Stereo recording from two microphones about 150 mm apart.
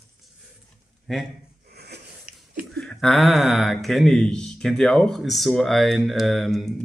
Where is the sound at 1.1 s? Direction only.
Centre (ahead or behind).